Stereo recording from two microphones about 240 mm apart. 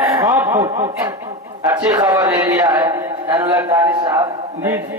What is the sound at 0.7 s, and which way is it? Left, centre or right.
A man's voice, right.